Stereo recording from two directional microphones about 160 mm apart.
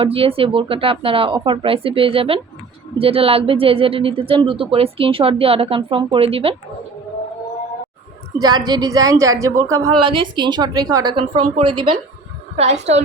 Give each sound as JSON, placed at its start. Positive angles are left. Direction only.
{"t": 0.0, "sound": "speech", "side_deg": -35}
{"t": 8.4, "sound": "a woman's voice", "side_deg": -25}
{"t": 12.5, "sound": "a woman's voice", "side_deg": -40}